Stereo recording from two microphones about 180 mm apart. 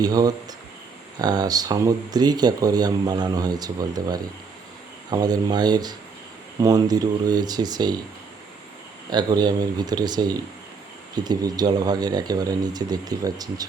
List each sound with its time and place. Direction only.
0.0 s speech: 20° right (ahead or behind)
9.0 s speech: 25° right (ahead or behind)